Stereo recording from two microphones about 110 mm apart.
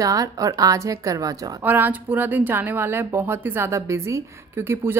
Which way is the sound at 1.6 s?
15° right (ahead or behind).